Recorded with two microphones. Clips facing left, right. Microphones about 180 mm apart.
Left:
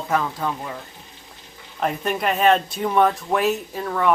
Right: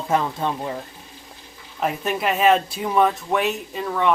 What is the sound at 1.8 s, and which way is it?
Speech, 5° right (ahead or behind).